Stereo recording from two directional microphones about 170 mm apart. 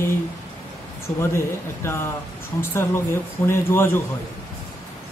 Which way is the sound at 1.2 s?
15° left (ahead or behind).